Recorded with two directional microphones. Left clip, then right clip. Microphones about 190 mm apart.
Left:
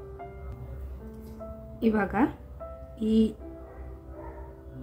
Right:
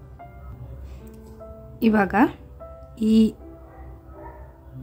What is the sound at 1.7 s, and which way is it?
A woman's voice, 35° right (ahead or behind).